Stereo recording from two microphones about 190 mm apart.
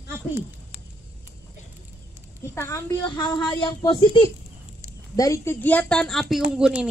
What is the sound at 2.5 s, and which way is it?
A woman's voice, 15° left (ahead or behind).